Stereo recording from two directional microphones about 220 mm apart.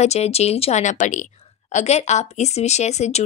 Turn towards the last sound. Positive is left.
turn(degrees=30)  # may be behind; listen again after turning